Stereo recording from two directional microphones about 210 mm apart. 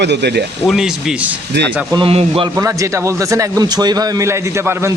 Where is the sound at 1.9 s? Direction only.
25° right (ahead or behind).